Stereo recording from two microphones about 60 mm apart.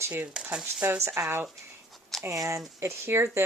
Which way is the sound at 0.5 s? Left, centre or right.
Right.